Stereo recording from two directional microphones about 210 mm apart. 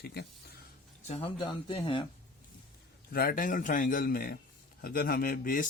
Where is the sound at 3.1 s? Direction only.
40° left (ahead or behind).